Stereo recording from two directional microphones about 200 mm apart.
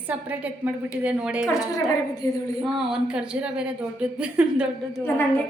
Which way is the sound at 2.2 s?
15° left (ahead or behind).